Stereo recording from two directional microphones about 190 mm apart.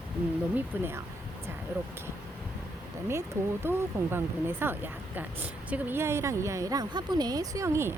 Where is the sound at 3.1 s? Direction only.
15° right (ahead or behind).